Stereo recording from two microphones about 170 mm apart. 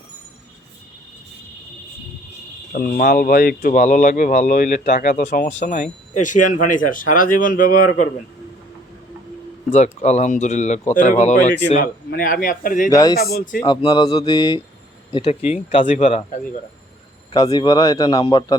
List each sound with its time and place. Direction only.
2.7 s speech: 60° left (ahead or behind)
9.7 s speech: 40° left (ahead or behind)
11.8 s a man's voice: 55° left (ahead or behind)
12.9 s a man's voice: 20° left (ahead or behind)
13.3 s speech: 55° left (ahead or behind)
13.7 s a man's voice: 25° left (ahead or behind)
15.1 s speech: 35° left (ahead or behind)
17.3 s a man's voice: 20° left (ahead or behind)